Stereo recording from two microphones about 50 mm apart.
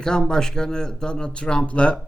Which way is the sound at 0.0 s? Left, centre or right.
Centre.